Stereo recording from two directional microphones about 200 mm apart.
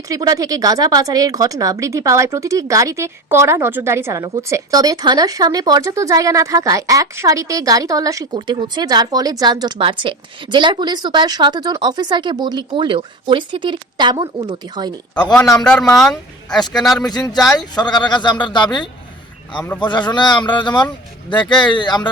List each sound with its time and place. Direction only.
0.1 s speech: 20° right (ahead or behind)
15.5 s a man's voice: 5° left (ahead or behind)
17.6 s a woman's voice: 20° left (ahead or behind)
19.5 s a man's voice: 10° left (ahead or behind)
19.8 s a woman's voice: 20° left (ahead or behind)